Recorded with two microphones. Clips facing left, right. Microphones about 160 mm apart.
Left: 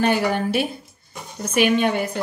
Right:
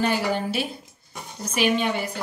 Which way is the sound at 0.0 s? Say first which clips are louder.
Left 4 dB; 60° left (ahead or behind).